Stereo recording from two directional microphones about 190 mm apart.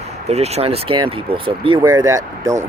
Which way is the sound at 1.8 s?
15° right (ahead or behind).